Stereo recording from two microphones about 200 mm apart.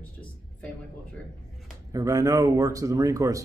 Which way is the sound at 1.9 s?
15° right (ahead or behind).